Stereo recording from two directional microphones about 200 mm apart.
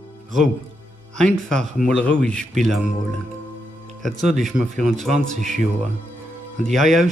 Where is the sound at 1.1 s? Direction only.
5° left (ahead or behind).